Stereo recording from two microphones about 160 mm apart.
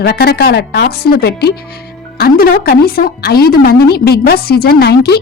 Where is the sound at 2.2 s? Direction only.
70° left (ahead or behind).